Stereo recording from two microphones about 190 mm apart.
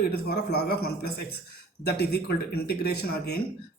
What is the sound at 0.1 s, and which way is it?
Speech, 60° left (ahead or behind).